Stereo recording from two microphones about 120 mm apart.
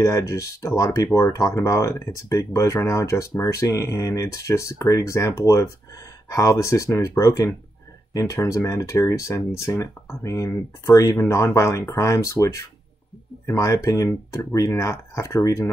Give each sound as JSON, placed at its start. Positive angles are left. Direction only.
{"t": 0.0, "sound": "speech", "side_deg": 25}